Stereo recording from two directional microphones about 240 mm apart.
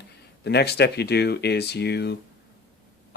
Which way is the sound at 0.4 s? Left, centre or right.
Left.